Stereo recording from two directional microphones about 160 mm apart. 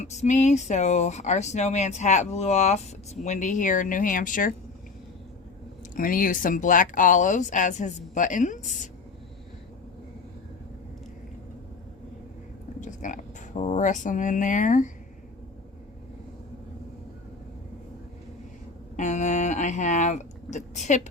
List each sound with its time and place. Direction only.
0.0 s speech: 45° left (ahead or behind)
5.9 s speech: 60° left (ahead or behind)
12.8 s speech: 50° left (ahead or behind)
18.9 s speech: 50° left (ahead or behind)